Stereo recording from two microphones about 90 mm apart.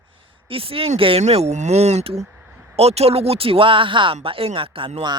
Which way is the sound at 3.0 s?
90° right.